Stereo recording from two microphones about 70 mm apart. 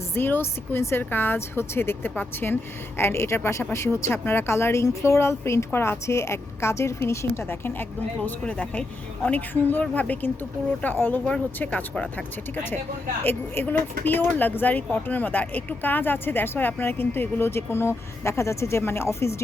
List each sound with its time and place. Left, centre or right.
0.1 s speech: left
8.4 s a woman's voice: centre
13.2 s speech: left